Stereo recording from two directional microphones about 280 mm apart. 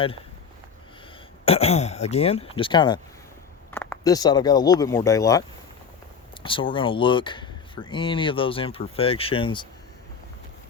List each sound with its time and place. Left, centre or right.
1.5 s speech: left